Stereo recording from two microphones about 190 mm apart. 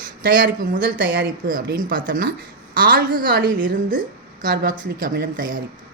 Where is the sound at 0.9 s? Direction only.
55° right (ahead or behind).